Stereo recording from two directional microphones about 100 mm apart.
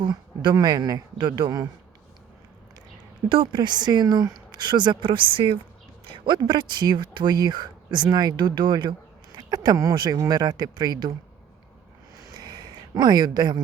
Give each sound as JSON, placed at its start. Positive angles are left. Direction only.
{"t": 0.0, "sound": "speech", "side_deg": -50}
{"t": 3.2, "sound": "speech", "side_deg": -55}
{"t": 9.5, "sound": "speech", "side_deg": -35}
{"t": 12.3, "sound": "a sound", "side_deg": -45}